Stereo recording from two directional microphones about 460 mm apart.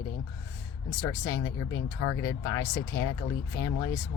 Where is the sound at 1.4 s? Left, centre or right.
Left.